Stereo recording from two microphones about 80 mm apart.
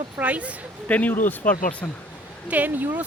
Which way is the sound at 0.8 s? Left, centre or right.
Centre.